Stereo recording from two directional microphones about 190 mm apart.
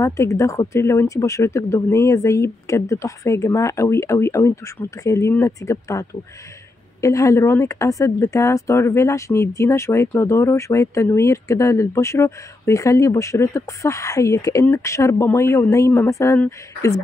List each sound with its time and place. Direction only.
0.0 s speech: 15° left (ahead or behind)